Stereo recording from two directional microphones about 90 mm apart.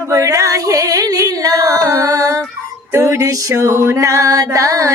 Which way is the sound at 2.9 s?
30° right (ahead or behind).